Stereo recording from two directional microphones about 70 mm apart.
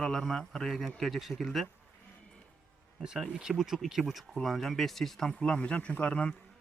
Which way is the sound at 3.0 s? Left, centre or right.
Centre.